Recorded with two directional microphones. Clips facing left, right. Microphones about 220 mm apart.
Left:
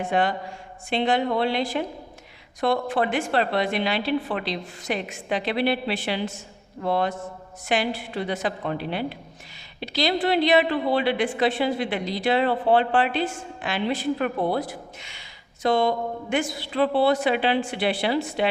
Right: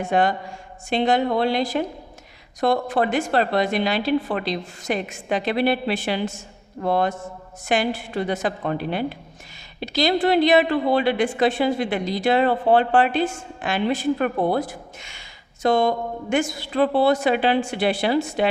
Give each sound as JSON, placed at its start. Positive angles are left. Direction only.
{"t": 0.0, "sound": "a woman's voice", "side_deg": -45}